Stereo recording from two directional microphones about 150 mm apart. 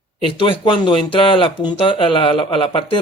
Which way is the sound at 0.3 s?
35° left (ahead or behind).